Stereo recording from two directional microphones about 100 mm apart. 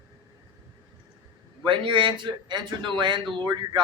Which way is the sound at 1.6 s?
60° right (ahead or behind).